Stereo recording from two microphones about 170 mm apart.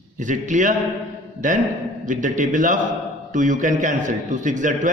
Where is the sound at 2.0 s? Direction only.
50° right (ahead or behind).